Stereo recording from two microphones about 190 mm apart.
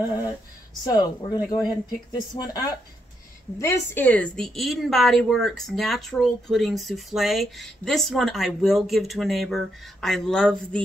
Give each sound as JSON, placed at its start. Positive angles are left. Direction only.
{"t": 0.8, "sound": "a woman's voice", "side_deg": 20}